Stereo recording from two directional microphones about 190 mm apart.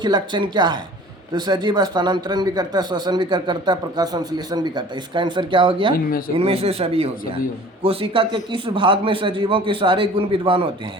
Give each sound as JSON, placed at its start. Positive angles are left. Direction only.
{"t": 0.0, "sound": "speech", "side_deg": -25}
{"t": 5.9, "sound": "speech", "side_deg": 50}
{"t": 6.3, "sound": "speech", "side_deg": -30}